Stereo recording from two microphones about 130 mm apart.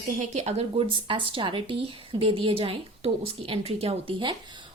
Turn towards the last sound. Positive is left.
turn(degrees=-40)  # may be behind; listen again after turning